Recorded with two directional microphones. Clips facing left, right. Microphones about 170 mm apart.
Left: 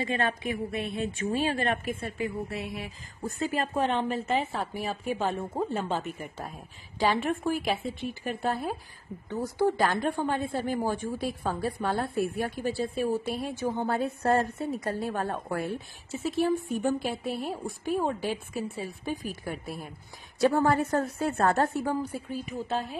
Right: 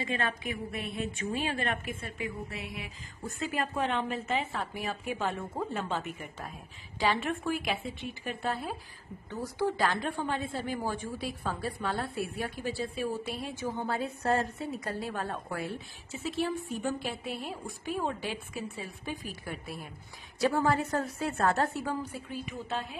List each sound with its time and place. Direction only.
0.0 s a woman's voice: 35° left (ahead or behind)